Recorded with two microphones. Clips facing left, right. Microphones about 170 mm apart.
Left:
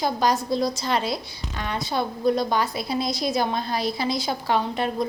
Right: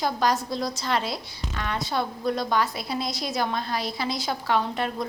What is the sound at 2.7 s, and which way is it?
A woman's voice, 30° left (ahead or behind).